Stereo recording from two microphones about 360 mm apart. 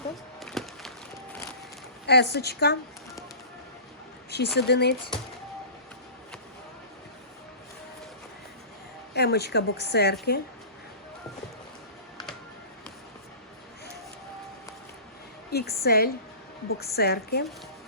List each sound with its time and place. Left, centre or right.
0.3 s a sound: centre
2.0 s a woman's voice: left
4.3 s a woman's voice: left
9.1 s a woman's voice: left
15.5 s a woman's voice: left